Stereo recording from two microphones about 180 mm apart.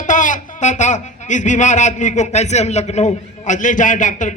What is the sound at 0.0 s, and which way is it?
A man's voice, 45° left (ahead or behind).